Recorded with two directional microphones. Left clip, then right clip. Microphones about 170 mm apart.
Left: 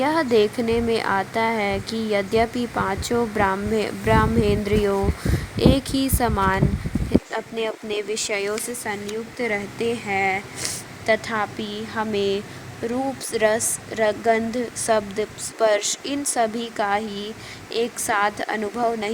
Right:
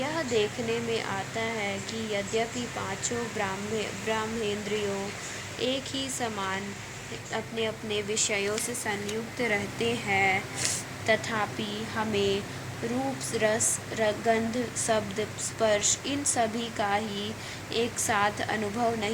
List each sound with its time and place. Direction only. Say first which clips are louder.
0.0 s speech: left 9 dB; 45° left (ahead or behind)
5.5 s speech: left 10 dB; 45° left (ahead or behind)